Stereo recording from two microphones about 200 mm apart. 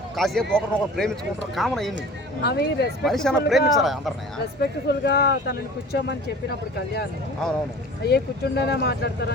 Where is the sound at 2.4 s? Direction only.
55° left (ahead or behind).